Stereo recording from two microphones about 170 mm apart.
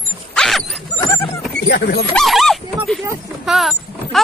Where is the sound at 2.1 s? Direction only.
Centre (ahead or behind).